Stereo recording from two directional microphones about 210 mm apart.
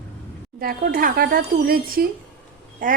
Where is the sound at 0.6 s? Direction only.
45° right (ahead or behind).